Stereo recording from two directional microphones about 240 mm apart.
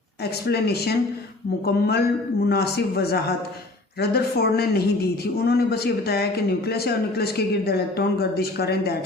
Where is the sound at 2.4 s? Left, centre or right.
Left.